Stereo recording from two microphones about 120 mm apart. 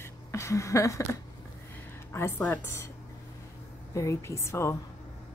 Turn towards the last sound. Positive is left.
turn(degrees=25)  # may be behind; listen again after turning